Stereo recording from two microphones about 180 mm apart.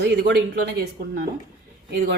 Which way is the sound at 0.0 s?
70° right (ahead or behind).